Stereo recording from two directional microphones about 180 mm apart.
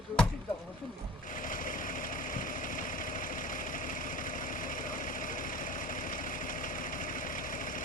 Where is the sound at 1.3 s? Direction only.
50° left (ahead or behind).